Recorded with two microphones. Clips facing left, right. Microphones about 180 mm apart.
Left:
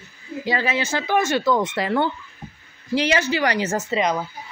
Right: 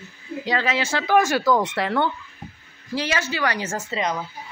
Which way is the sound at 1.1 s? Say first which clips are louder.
Right 2 dB; 5° right (ahead or behind).